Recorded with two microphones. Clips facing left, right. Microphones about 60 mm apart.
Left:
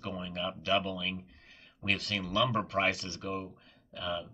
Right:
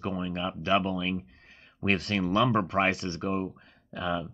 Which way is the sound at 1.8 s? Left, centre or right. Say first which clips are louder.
Right 6 dB; right.